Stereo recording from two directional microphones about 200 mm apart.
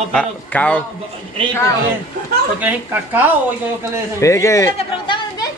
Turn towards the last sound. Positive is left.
turn(degrees=25)  # may be behind; listen again after turning